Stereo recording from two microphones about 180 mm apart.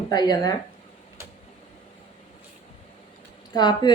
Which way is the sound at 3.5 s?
25° left (ahead or behind).